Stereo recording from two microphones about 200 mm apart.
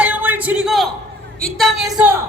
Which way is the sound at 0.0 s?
10° right (ahead or behind).